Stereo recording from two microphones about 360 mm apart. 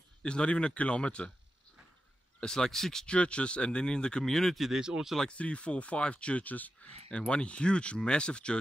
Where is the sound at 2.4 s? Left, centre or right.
Centre.